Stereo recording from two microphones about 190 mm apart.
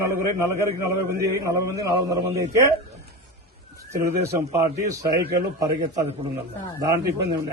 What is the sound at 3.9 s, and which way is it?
A man's voice, 15° right (ahead or behind).